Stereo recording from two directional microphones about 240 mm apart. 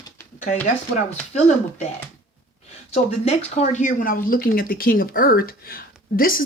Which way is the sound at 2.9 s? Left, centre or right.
Left.